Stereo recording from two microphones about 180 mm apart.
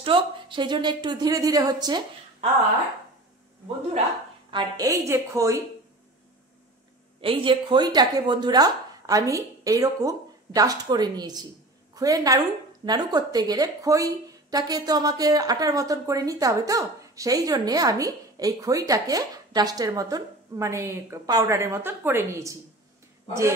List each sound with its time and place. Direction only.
0.0 s a woman's voice: 25° right (ahead or behind)
4.5 s a woman's voice: 25° right (ahead or behind)
7.2 s a woman's voice: 30° right (ahead or behind)